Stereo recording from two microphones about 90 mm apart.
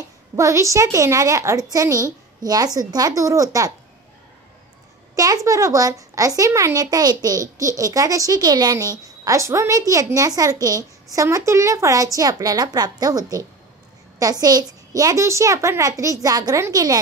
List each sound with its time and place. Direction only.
0.4 s a woman's voice: 35° right (ahead or behind)
5.1 s a woman's voice: 40° right (ahead or behind)